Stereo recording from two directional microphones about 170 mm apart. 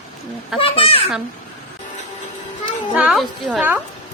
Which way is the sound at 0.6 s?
35° left (ahead or behind).